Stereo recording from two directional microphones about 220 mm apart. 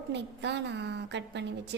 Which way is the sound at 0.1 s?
50° right (ahead or behind).